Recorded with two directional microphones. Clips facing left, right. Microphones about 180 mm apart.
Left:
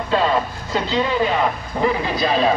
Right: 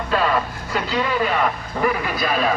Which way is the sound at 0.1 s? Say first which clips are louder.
Left 2 dB; 20° left (ahead or behind).